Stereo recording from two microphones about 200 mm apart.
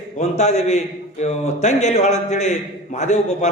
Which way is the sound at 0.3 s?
35° left (ahead or behind).